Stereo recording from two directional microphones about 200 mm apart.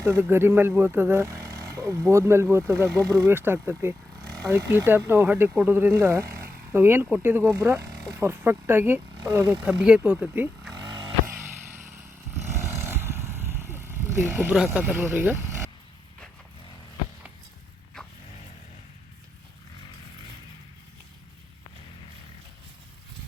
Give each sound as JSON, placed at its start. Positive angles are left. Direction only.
{"t": 0.0, "sound": "speech", "side_deg": -10}
{"t": 10.8, "sound": "vehicle", "side_deg": -20}
{"t": 11.3, "sound": "vehicle", "side_deg": -10}